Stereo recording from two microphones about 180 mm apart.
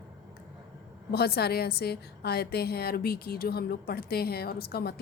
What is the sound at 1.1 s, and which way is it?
A woman's voice, 60° left (ahead or behind).